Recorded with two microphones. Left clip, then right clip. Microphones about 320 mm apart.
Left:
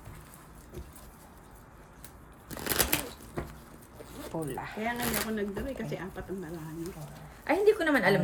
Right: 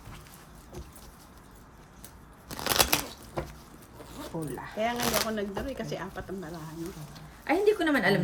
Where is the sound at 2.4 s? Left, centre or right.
Centre.